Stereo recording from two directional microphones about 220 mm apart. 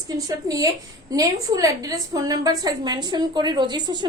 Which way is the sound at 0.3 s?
15° right (ahead or behind).